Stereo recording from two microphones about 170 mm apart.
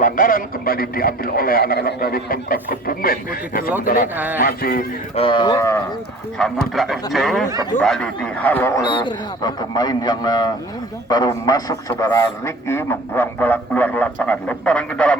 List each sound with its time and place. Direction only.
0.0 s speech: 55° left (ahead or behind)
4.1 s speech: 10° right (ahead or behind)
4.4 s speech: 60° left (ahead or behind)
5.1 s a man's voice: 30° left (ahead or behind)
6.4 s a man's voice: 5° left (ahead or behind)